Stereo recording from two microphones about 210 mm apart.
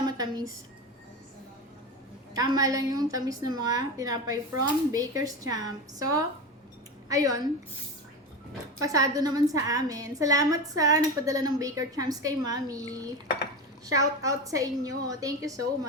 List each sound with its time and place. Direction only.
0.0 s a sound: 20° right (ahead or behind)
2.3 s a woman's voice: 15° right (ahead or behind)
8.8 s a woman's voice: 15° right (ahead or behind)
13.8 s a woman's voice: 15° right (ahead or behind)